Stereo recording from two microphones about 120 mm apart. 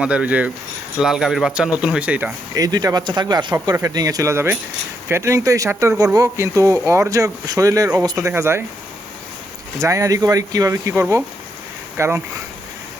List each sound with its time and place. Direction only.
0.0 s speech: 10° right (ahead or behind)
2.6 s speech: 30° right (ahead or behind)
9.7 s speech: 25° right (ahead or behind)